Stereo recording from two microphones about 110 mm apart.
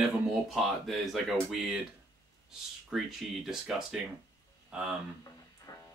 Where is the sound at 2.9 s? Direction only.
Centre (ahead or behind).